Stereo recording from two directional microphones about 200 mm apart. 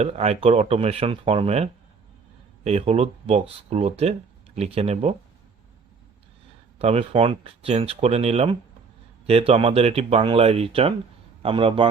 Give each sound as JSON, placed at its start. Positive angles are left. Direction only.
{"t": 0.0, "sound": "speech", "side_deg": -30}
{"t": 6.7, "sound": "speech", "side_deg": -30}